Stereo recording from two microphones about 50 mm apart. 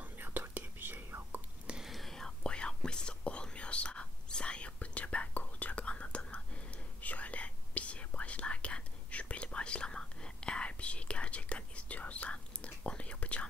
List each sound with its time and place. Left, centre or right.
0.0 s whispering: right
1.8 s whispering: centre
2.4 s whispering: centre